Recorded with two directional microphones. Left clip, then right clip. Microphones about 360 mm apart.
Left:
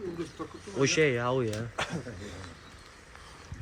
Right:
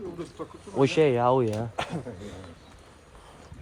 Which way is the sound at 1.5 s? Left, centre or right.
Right.